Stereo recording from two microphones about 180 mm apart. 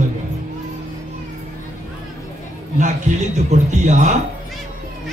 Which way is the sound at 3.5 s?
40° right (ahead or behind).